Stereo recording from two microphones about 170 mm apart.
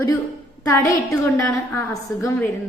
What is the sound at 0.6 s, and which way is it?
A woman's voice, 20° left (ahead or behind).